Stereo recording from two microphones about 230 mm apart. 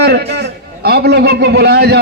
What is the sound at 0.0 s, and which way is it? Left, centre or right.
A man's voice, right.